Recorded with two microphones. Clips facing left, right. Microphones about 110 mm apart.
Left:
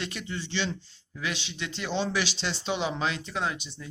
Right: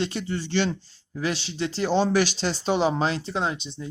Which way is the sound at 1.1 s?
35° right (ahead or behind).